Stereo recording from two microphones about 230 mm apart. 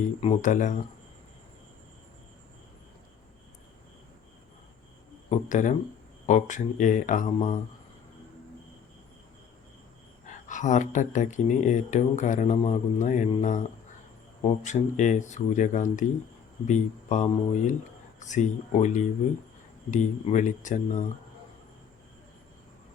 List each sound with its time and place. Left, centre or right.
0.2 s speech: left
5.3 s speech: left
10.2 s speech: left